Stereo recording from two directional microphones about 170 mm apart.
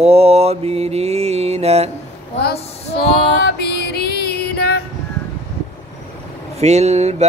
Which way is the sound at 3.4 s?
70° left (ahead or behind).